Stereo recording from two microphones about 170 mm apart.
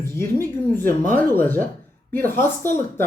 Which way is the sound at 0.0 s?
15° left (ahead or behind).